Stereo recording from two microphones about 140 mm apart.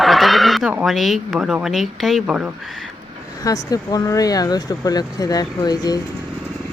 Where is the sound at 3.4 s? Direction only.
25° left (ahead or behind).